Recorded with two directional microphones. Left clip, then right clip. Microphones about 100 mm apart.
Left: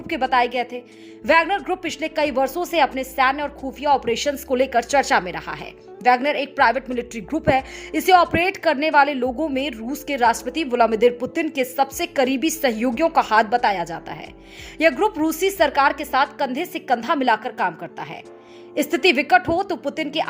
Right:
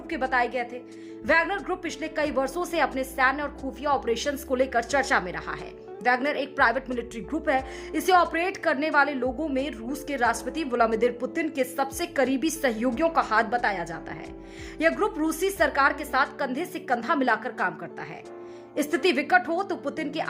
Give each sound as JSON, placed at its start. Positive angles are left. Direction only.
{"t": 0.1, "sound": "a woman's voice", "side_deg": 40}